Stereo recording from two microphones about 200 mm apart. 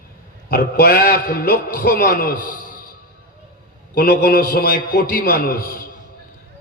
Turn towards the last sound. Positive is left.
turn(degrees=45)  # may be behind; listen again after turning